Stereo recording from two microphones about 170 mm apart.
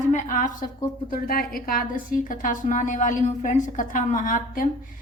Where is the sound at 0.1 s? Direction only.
50° left (ahead or behind).